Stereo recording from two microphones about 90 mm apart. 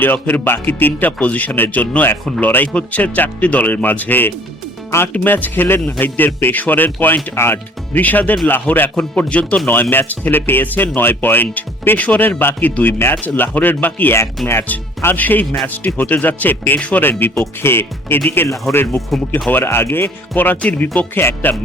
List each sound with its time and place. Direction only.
0.0 s speech: 20° left (ahead or behind)